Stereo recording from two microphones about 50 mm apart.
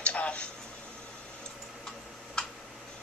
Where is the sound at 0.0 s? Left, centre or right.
Left.